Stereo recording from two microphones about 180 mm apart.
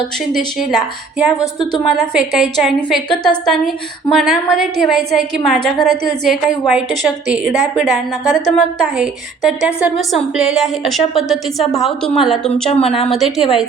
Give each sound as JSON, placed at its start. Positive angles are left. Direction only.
{"t": 0.3, "sound": "a woman's voice", "side_deg": 0}
{"t": 12.7, "sound": "a woman's voice", "side_deg": 35}
{"t": 13.0, "sound": "a woman's voice", "side_deg": 0}